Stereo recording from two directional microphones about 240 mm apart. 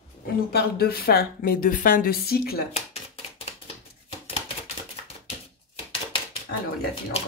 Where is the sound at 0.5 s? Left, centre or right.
Left.